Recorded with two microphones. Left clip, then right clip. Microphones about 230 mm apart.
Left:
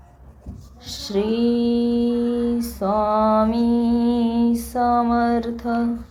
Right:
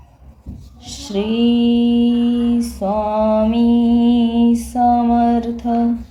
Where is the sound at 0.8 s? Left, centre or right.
Left.